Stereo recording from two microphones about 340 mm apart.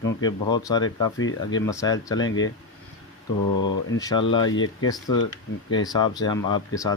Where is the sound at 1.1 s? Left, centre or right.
Left.